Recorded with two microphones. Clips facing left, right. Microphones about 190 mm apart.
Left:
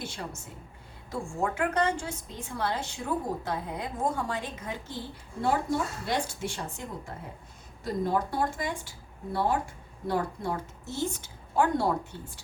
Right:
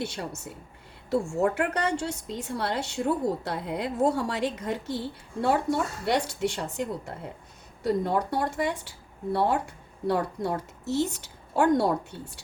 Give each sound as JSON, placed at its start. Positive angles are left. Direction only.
{"t": 0.0, "sound": "a woman's voice", "side_deg": -65}